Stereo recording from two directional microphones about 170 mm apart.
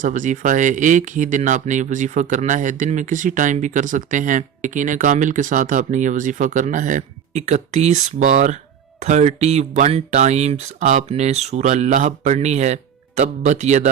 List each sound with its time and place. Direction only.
0.0 s speech: 50° right (ahead or behind)